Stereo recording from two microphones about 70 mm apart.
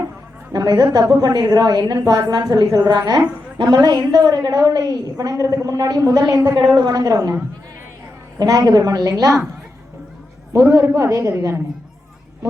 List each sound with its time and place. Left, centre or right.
0.5 s a woman's voice: right
2.0 s a woman's voice: right
3.6 s a woman's voice: right
6.7 s a woman's voice: right
8.4 s a woman's voice: right
10.5 s a woman's voice: right